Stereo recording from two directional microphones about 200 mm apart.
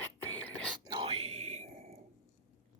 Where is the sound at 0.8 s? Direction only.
25° right (ahead or behind).